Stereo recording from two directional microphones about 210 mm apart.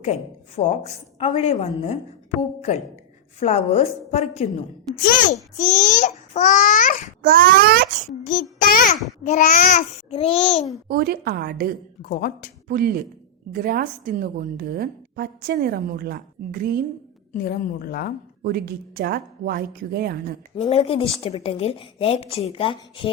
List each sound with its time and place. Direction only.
0.0 s a child's voice: 35° left (ahead or behind)
5.5 s a child's voice: 40° left (ahead or behind)
7.2 s a woman's voice: 45° right (ahead or behind)
8.2 s a child's voice: 40° left (ahead or behind)
10.8 s a woman's voice: 45° right (ahead or behind)
12.0 s a woman's voice: 45° left (ahead or behind)
12.6 s a woman's voice: 45° right (ahead or behind)
17.3 s a woman's voice: 45° left (ahead or behind)
18.4 s a woman's voice: 50° right (ahead or behind)
20.6 s a woman's voice: 30° left (ahead or behind)